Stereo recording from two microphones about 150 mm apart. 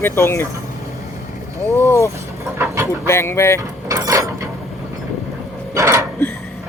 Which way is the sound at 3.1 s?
15° left (ahead or behind).